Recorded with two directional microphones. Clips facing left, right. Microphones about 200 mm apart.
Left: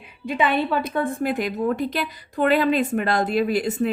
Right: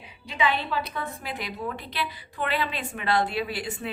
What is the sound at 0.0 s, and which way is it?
A woman's voice, 55° left (ahead or behind).